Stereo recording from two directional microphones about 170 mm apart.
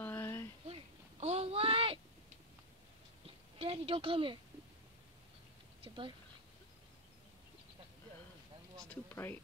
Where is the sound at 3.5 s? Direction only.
35° right (ahead or behind).